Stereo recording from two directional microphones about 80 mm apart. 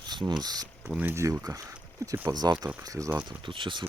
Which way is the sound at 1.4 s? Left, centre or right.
Right.